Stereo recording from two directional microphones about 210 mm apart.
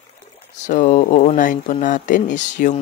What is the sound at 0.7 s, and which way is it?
Speech, 35° left (ahead or behind).